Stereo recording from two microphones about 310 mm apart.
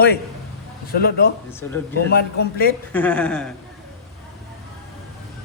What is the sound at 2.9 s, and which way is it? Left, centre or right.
Speech, centre.